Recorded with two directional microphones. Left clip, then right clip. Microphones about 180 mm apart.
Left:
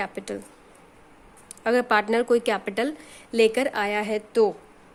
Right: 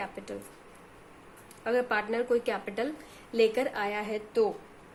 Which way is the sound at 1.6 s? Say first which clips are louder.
Left 7 dB; 65° left (ahead or behind).